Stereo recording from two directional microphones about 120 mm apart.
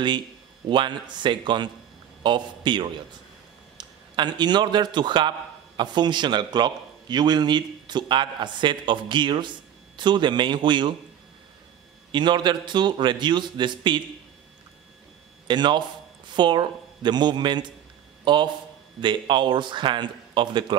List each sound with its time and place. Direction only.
0.7 s a man's voice: 40° right (ahead or behind)
12.1 s a man's voice: 40° right (ahead or behind)
15.4 s a man's voice: 40° right (ahead or behind)